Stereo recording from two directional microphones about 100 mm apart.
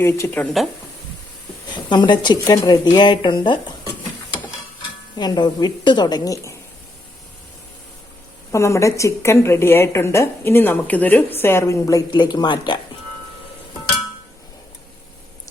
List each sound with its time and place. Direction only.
0.0 s a woman's voice: 25° left (ahead or behind)
1.7 s speech: 50° left (ahead or behind)
5.1 s speech: 45° left (ahead or behind)
8.5 s a woman's voice: 30° left (ahead or behind)
12.1 s speech: 45° left (ahead or behind)